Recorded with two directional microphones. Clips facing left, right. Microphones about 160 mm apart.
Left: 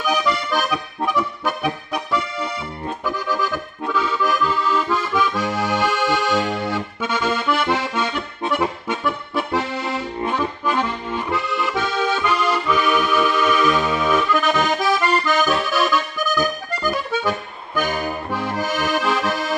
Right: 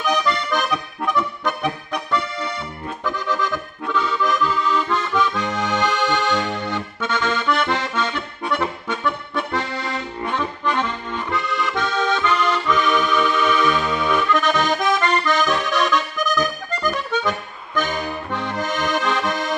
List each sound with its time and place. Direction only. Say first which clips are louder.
0.0 s accordion: even; 10° left (ahead or behind)
3.1 s accordion: even; 10° left (ahead or behind)